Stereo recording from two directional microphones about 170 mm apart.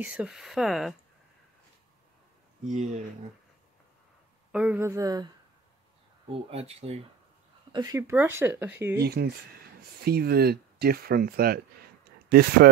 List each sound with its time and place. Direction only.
0.0 s speech: 5° right (ahead or behind)
4.5 s speech: 5° right (ahead or behind); by 5.3 s 20° right (ahead or behind)
6.2 s speech: 35° right (ahead or behind)
7.7 s speech: 20° right (ahead or behind)
9.0 s speech: 70° right (ahead or behind)